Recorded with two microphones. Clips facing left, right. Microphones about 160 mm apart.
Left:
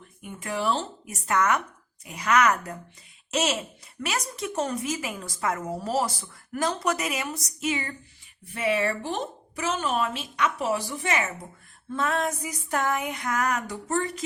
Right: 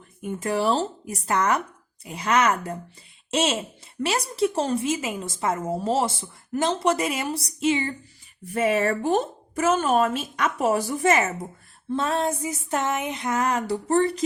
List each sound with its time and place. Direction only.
0.2 s a woman's voice: 40° right (ahead or behind)
8.5 s a woman's voice: 45° right (ahead or behind)
11.9 s a woman's voice: 30° right (ahead or behind)